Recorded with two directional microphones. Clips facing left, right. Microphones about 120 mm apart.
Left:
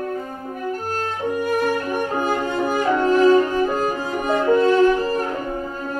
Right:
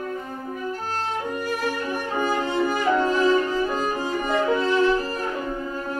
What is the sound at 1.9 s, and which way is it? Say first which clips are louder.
Music: left 3 dB; 50° left (ahead or behind).